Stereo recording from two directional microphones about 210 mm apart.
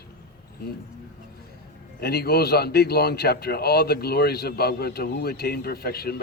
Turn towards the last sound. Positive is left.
turn(degrees=45)  # may be behind; listen again after turning